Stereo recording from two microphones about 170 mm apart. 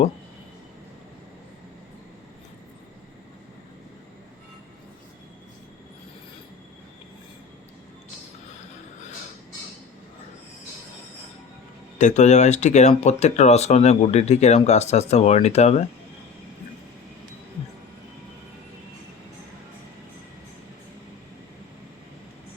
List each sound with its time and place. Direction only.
11.9 s speech: 45° left (ahead or behind)